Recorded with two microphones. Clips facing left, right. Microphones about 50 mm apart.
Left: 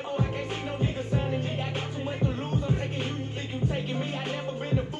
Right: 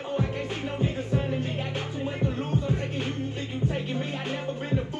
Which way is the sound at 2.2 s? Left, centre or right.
Left.